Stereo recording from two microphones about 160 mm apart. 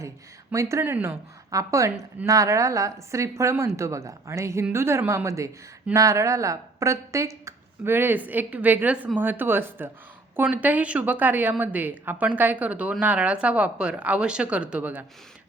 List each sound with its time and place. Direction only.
0.5 s a woman's voice: 20° right (ahead or behind)